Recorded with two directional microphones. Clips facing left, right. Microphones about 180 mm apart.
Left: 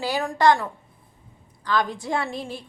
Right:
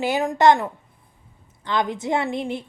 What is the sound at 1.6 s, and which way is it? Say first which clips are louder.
Speech: right 1 dB; 20° right (ahead or behind).